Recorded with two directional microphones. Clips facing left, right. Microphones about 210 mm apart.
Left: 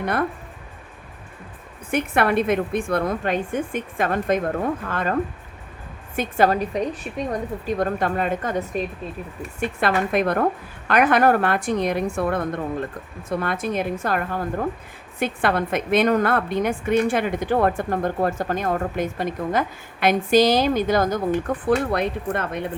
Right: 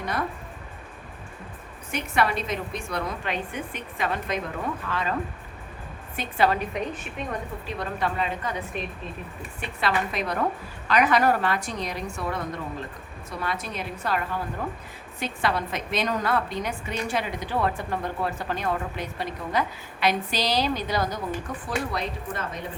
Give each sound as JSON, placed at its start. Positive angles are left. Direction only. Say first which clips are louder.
{"t": 0.0, "sound": "speech", "louder": "left 6 dB", "side_deg": 60}
{"t": 1.9, "sound": "a woman's voice", "louder": "left 5 dB", "side_deg": 55}
{"t": 6.1, "sound": "a woman's voice", "louder": "left 5 dB", "side_deg": 45}
{"t": 7.8, "sound": "a woman's voice", "louder": "left 4 dB", "side_deg": 50}